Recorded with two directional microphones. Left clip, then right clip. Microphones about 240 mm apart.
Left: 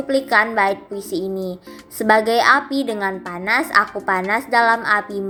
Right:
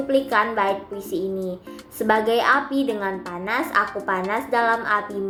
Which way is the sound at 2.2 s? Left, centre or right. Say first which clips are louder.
Left 4 dB; left.